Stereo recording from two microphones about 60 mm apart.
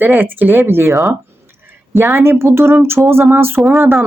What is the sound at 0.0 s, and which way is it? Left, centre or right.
Speech, right.